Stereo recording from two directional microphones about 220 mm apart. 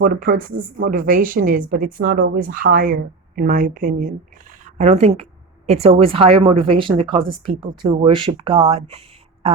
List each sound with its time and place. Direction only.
0.0 s a woman's voice: 40° right (ahead or behind)